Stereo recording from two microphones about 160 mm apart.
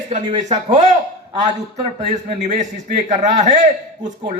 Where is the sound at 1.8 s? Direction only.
40° right (ahead or behind).